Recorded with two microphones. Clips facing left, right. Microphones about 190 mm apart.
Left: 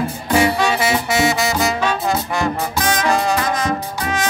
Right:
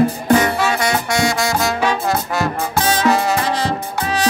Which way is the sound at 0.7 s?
5° left (ahead or behind).